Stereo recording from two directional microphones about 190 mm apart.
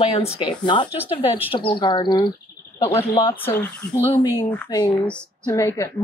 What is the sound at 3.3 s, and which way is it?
Speech, 10° left (ahead or behind).